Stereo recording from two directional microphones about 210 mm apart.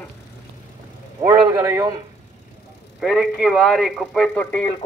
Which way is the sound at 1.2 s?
15° right (ahead or behind).